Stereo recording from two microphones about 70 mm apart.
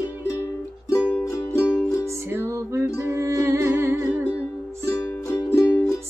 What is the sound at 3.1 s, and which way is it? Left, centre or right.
Humming, right.